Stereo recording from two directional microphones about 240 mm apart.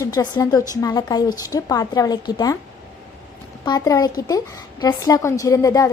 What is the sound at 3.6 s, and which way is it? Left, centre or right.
A woman's voice, centre.